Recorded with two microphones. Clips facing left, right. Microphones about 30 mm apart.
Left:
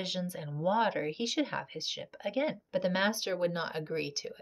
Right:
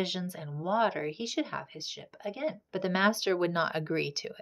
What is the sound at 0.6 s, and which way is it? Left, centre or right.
Speech, centre.